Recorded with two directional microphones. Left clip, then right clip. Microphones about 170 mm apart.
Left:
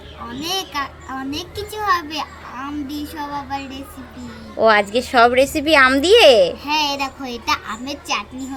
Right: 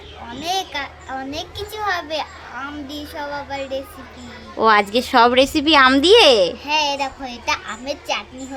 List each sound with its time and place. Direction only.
0.4 s a child's voice: 15° right (ahead or behind)
6.7 s a child's voice: 15° right (ahead or behind)